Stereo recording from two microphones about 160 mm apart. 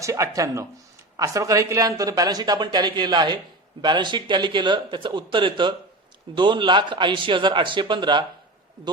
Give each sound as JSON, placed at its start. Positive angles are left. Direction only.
{"t": 0.0, "sound": "speech", "side_deg": -20}